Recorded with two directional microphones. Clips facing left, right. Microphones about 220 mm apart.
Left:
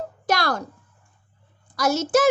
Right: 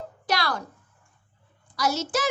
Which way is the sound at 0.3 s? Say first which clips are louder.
Left 4 dB; 45° left (ahead or behind).